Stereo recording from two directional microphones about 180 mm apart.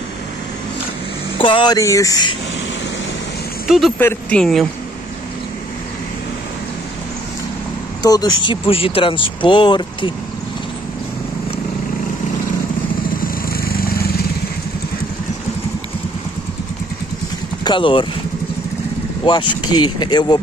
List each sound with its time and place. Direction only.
1.4 s speech: 25° left (ahead or behind)
3.6 s speech: centre (ahead or behind)
8.0 s speech: 20° left (ahead or behind)
13.2 s vehicle: 55° left (ahead or behind)
17.6 s speech: 30° left (ahead or behind)
19.2 s speech: 25° left (ahead or behind)